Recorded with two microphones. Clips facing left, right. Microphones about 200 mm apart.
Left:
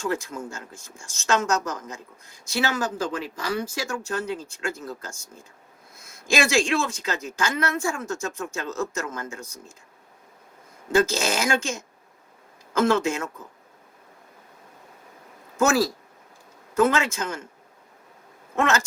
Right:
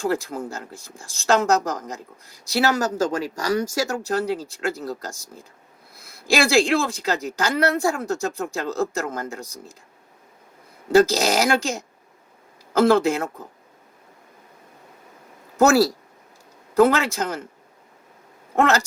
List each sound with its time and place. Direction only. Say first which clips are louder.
0.0 s speech: right 4 dB; 35° right (ahead or behind)
10.9 s speech: right 5 dB; 35° right (ahead or behind)
15.5 s speech: right 5 dB; 40° right (ahead or behind)
18.5 s speech: right 4 dB; 35° right (ahead or behind)